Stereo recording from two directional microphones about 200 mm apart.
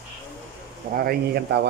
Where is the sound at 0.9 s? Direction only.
50° right (ahead or behind).